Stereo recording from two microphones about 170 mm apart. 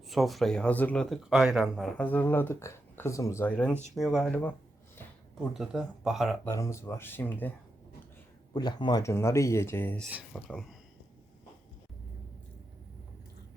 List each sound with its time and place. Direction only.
0.1 s speech: centre (ahead or behind)
2.0 s speech: 10° left (ahead or behind)
3.9 s speech: centre (ahead or behind)
5.5 s speech: centre (ahead or behind)
6.4 s speech: 15° left (ahead or behind)
8.5 s speech: 25° left (ahead or behind); by 10.8 s 5° left (ahead or behind)